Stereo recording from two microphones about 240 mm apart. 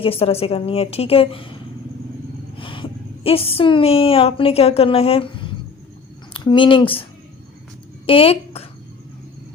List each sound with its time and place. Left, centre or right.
0.0 s a woman's voice: left
2.6 s a woman's voice: left
8.0 s speech: left